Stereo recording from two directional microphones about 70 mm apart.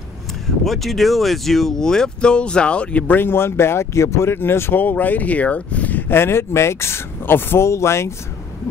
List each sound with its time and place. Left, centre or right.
0.7 s speech: centre; by 8.1 s left